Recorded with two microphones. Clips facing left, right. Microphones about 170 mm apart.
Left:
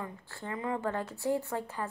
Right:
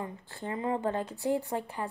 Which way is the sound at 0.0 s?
20° right (ahead or behind).